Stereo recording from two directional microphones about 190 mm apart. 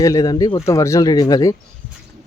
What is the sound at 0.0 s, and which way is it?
Speech, 20° left (ahead or behind).